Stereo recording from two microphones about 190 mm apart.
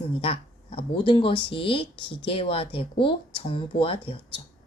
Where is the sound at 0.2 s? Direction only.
30° left (ahead or behind).